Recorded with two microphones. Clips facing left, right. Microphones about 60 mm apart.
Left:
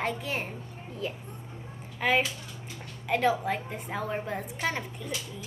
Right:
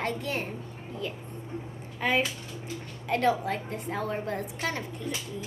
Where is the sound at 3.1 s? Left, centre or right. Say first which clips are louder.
Even; centre.